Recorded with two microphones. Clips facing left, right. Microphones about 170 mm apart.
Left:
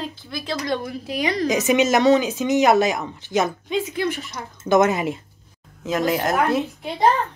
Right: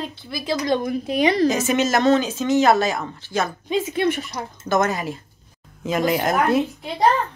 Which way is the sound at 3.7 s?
25° right (ahead or behind).